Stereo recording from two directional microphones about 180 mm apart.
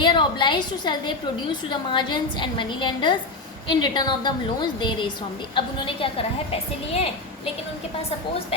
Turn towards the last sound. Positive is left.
turn(degrees=35)  # may be behind; listen again after turning